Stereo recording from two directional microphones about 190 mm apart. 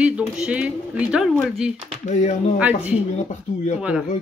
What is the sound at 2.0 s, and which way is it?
Speech, 40° left (ahead or behind).